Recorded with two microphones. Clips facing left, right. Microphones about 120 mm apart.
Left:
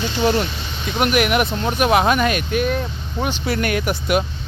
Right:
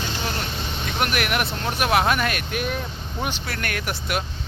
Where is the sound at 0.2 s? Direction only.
20° left (ahead or behind).